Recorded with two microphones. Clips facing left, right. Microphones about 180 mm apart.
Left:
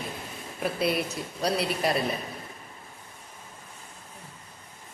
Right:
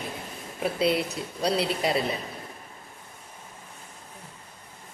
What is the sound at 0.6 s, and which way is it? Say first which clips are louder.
A woman's voice: right 2 dB; 25° right (ahead or behind).